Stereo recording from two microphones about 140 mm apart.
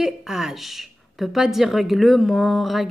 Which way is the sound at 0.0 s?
5° right (ahead or behind).